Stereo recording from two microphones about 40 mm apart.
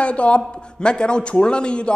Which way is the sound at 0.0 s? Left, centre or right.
Left.